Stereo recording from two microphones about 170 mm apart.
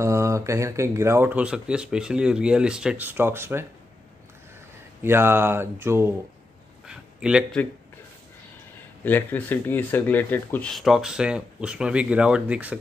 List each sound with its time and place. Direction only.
0.0 s speech: 15° right (ahead or behind)
5.0 s speech: 15° right (ahead or behind)
6.9 s a sound: 5° right (ahead or behind)
9.0 s speech: 10° left (ahead or behind); by 12.7 s 10° right (ahead or behind)